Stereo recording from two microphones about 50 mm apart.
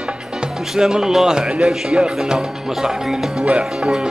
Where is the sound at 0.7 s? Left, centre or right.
Centre.